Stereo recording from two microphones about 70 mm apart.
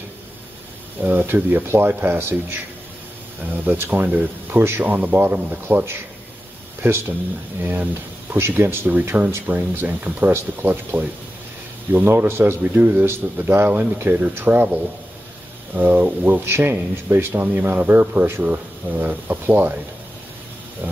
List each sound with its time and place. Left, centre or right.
1.0 s speech: right
3.6 s speech: right
20.8 s vehicle: right